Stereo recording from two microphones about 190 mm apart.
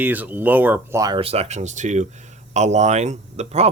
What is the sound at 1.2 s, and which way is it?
Speech, 30° right (ahead or behind).